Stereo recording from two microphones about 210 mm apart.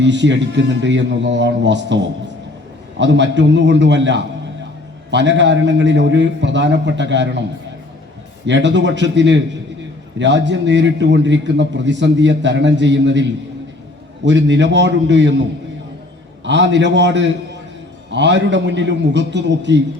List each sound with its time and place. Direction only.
0.0 s a man's voice: 60° right (ahead or behind)
3.0 s a man's voice: 60° right (ahead or behind)
8.4 s a man's voice: 60° right (ahead or behind)
14.3 s a man's voice: 60° right (ahead or behind)